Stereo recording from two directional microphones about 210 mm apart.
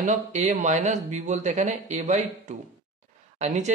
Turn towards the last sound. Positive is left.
turn(degrees=-35)  # may be behind; listen again after turning